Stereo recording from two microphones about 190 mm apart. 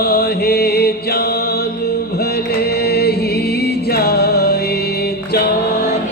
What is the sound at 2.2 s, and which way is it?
Music, 55° left (ahead or behind).